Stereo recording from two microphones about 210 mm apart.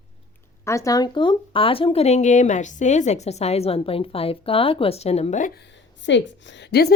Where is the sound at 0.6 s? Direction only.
15° left (ahead or behind).